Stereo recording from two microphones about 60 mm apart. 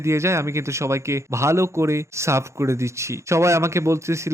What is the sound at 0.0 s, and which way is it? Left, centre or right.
A man's voice, right.